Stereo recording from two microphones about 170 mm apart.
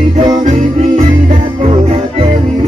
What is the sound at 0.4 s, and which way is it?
Music, 45° right (ahead or behind).